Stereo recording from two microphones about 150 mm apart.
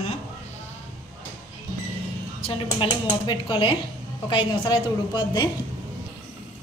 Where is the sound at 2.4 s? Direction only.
35° left (ahead or behind).